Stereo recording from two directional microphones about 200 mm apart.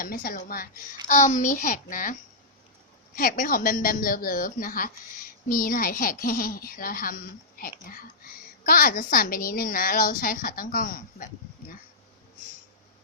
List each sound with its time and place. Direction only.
0.0 s a woman's voice: 45° left (ahead or behind)
3.2 s a woman's voice: 45° left (ahead or behind)